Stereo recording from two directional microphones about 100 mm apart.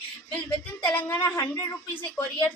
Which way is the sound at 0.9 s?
20° left (ahead or behind).